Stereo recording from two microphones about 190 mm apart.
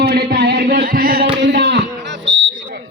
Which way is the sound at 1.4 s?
65° right (ahead or behind).